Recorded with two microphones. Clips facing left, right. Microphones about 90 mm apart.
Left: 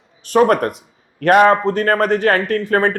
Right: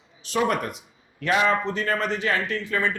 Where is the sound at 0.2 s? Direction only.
50° left (ahead or behind).